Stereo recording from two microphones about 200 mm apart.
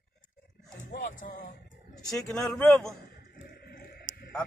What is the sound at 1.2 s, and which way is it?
Vehicle, 40° left (ahead or behind).